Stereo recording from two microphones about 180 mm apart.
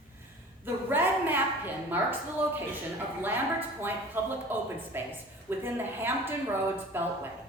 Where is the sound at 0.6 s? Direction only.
10° right (ahead or behind).